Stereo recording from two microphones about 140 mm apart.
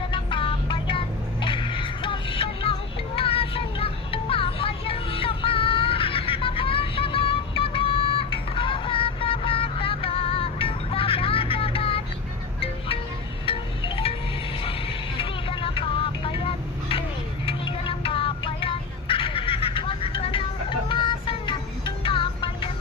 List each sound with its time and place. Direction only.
0.1 s vehicle: 35° left (ahead or behind)
13.4 s wind chime: 40° left (ahead or behind)
14.6 s music: 40° left (ahead or behind)